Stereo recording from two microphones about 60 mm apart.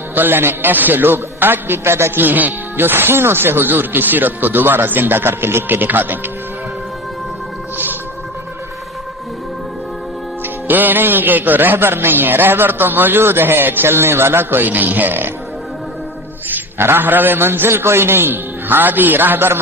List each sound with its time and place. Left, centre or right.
0.1 s a man's voice: right
10.7 s a man's voice: right
16.5 s a man's voice: right